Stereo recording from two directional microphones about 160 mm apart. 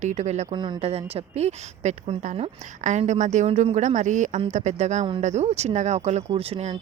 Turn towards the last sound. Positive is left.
turn(degrees=-35)  # may be behind; listen again after turning